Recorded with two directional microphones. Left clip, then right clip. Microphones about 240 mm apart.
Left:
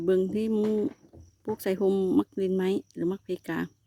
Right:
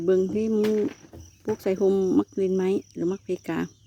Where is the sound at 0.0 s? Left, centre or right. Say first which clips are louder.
Right 3 dB; centre.